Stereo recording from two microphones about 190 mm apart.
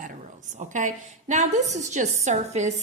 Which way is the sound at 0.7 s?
40° right (ahead or behind).